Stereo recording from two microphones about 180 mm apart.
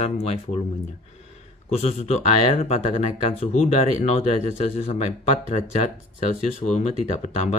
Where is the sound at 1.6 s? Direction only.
35° left (ahead or behind).